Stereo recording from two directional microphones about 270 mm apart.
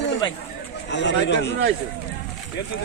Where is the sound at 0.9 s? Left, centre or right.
Left.